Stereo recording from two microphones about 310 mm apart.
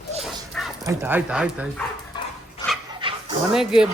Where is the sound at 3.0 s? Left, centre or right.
Centre.